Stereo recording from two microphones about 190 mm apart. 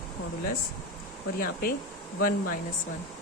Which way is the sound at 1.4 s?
50° left (ahead or behind).